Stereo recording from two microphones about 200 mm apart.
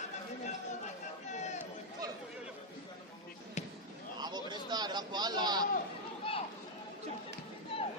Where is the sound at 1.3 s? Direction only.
35° left (ahead or behind).